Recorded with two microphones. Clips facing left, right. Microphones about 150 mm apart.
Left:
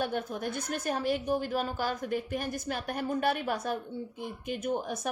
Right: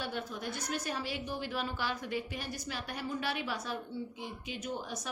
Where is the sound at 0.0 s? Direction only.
50° left (ahead or behind).